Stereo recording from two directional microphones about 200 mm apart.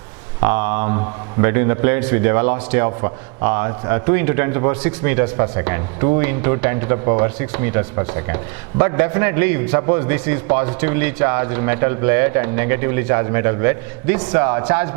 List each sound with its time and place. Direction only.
0.4 s a man's voice: 15° right (ahead or behind)
0.9 s a man's voice: 25° right (ahead or behind)
1.5 s a man's voice: 15° right (ahead or behind)